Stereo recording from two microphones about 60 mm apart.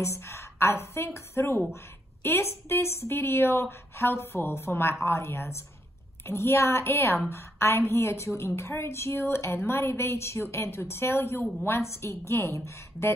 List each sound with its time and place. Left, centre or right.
0.0 s a woman's voice: left